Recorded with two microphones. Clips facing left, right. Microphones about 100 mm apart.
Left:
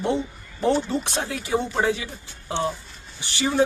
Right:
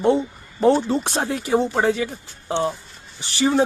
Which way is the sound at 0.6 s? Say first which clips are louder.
Right 5 dB; 40° right (ahead or behind).